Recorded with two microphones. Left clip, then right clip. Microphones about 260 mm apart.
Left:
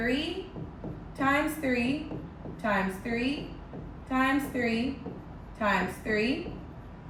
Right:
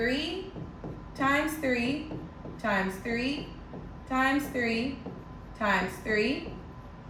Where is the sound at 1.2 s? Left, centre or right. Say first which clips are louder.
Even; centre.